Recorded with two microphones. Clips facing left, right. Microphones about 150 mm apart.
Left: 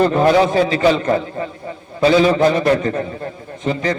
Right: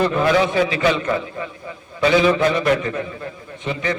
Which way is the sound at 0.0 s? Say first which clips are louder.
Left 4 dB; 40° left (ahead or behind).